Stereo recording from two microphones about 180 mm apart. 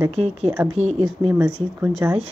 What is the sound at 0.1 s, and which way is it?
Speech, 35° right (ahead or behind).